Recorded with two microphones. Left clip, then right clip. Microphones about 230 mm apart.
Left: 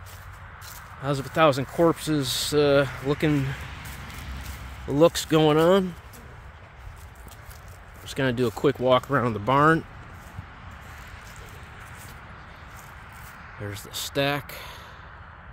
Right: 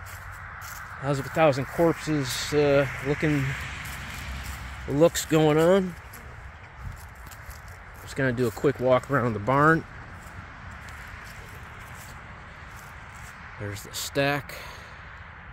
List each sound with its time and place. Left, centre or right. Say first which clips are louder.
0.6 s speech: right 1 dB; centre
3.5 s a sound: right 4 dB; right
4.9 s speech: left 2 dB; centre
8.1 s speech: left 1 dB; centre
13.6 s speech: left 1 dB; centre